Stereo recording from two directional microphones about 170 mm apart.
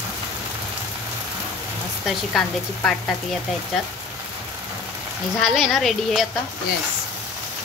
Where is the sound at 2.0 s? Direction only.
Centre (ahead or behind).